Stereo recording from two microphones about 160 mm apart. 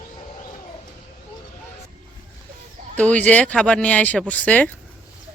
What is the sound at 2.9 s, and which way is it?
Speech, 10° left (ahead or behind).